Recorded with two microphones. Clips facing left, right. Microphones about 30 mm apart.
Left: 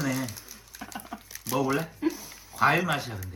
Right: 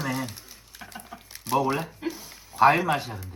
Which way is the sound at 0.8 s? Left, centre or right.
Right.